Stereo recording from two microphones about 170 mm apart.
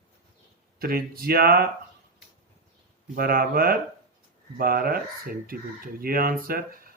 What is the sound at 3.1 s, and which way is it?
Speech, 60° right (ahead or behind).